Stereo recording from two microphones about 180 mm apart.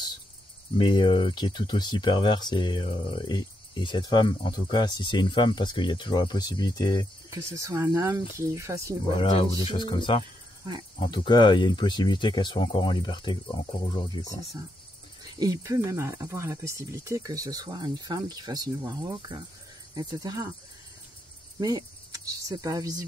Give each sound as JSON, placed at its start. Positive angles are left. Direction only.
{"t": 0.7, "sound": "speech", "side_deg": 30}
{"t": 7.2, "sound": "speech", "side_deg": -15}
{"t": 9.1, "sound": "speech", "side_deg": 30}
{"t": 15.3, "sound": "speech", "side_deg": -20}
{"t": 21.5, "sound": "speech", "side_deg": -20}